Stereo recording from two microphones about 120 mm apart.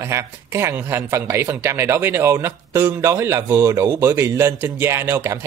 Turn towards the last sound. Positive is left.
turn(degrees=-20)  # may be behind; listen again after turning